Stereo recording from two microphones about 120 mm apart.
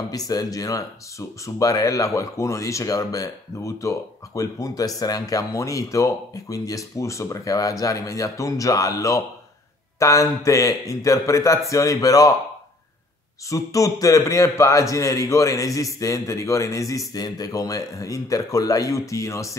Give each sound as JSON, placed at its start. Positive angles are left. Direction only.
{"t": 0.3, "sound": "speech", "side_deg": 30}
{"t": 13.5, "sound": "speech", "side_deg": 25}